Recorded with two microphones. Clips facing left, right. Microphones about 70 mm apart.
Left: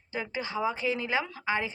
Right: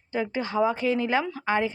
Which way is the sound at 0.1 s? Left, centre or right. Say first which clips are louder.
Right 6 dB; right.